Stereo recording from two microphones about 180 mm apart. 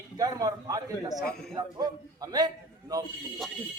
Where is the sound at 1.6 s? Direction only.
20° right (ahead or behind).